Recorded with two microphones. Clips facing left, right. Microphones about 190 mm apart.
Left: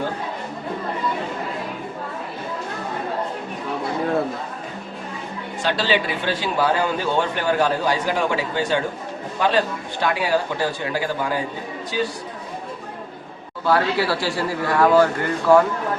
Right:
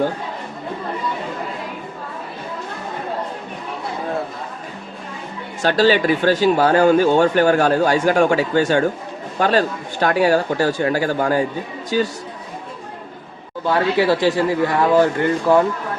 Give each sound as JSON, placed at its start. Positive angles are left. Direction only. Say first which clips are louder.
{"t": 5.6, "sound": "speech", "louder": "right 7 dB", "side_deg": -45}
{"t": 13.7, "sound": "a man's voice", "louder": "right 3 dB", "side_deg": -20}